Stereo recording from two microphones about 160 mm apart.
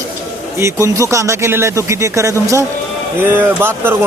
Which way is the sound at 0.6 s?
20° right (ahead or behind).